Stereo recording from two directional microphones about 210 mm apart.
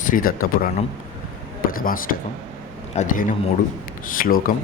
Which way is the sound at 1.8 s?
40° left (ahead or behind).